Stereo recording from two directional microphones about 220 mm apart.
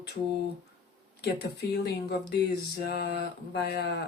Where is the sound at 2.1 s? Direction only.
50° left (ahead or behind).